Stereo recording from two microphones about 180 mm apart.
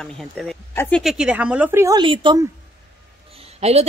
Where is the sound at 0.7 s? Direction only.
15° left (ahead or behind).